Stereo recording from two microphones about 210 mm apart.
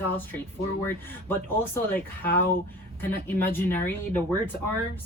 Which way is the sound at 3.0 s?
10° left (ahead or behind).